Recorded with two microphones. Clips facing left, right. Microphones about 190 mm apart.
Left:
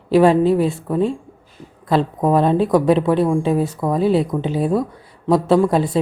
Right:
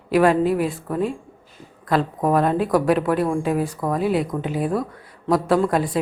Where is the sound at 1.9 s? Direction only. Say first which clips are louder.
Left 3 dB; 25° left (ahead or behind).